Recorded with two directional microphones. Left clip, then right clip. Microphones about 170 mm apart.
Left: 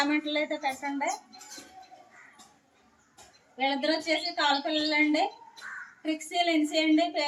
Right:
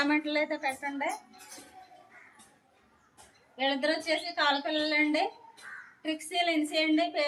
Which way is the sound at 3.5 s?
5° right (ahead or behind).